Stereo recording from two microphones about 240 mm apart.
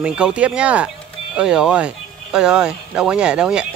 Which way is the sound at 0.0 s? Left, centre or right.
Centre.